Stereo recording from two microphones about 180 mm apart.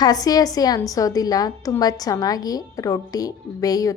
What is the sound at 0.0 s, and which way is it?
A woman's voice, 20° left (ahead or behind).